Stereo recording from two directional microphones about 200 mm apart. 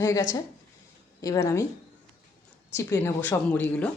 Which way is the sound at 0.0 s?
15° left (ahead or behind).